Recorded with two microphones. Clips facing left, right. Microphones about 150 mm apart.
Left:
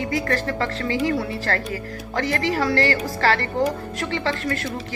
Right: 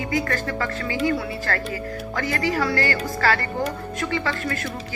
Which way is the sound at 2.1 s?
30° left (ahead or behind).